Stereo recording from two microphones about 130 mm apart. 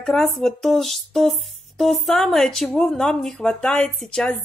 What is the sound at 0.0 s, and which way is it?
Speech, 5° left (ahead or behind).